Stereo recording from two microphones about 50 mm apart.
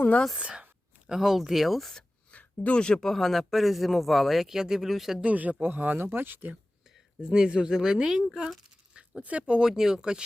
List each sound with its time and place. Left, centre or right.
0.3 s speech: centre
2.3 s a sound: left
3.0 s speech: centre
5.2 s speech: right
7.2 s speech: centre
8.9 s a sound: right
9.6 s speech: centre